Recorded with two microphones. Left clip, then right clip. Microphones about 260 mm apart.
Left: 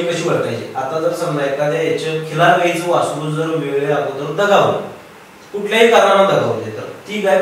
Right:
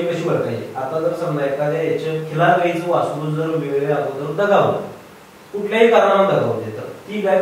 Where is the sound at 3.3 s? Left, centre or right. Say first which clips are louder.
Left 2 dB; centre.